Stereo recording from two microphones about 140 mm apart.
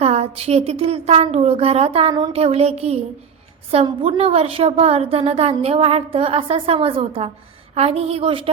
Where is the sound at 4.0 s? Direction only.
45° right (ahead or behind).